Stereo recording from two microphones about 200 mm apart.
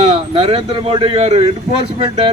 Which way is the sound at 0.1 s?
25° right (ahead or behind).